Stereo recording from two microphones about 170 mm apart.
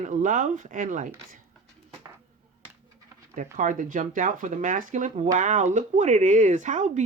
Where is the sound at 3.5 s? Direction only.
50° right (ahead or behind).